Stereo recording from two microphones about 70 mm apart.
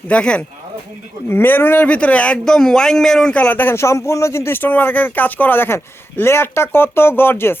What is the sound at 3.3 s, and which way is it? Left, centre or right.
Speech, left.